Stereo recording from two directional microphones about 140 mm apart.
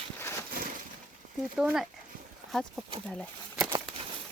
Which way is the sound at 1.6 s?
5° right (ahead or behind).